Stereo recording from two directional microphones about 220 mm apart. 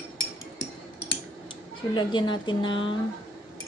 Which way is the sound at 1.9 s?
20° left (ahead or behind).